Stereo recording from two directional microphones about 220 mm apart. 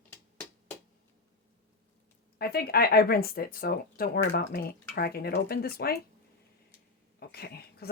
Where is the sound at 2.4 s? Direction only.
45° left (ahead or behind).